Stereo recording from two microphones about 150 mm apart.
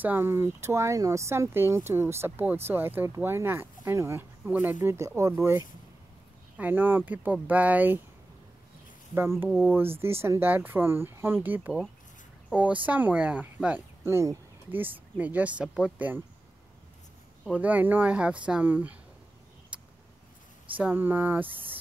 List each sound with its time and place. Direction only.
0.0 s speech: 15° right (ahead or behind)
9.1 s speech: 15° right (ahead or behind)
17.6 s speech: 10° right (ahead or behind)
19.7 s vehicle: 10° right (ahead or behind)
20.7 s speech: 10° right (ahead or behind)